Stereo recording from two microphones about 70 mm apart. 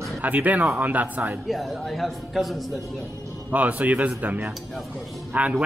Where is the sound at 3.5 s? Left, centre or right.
Right.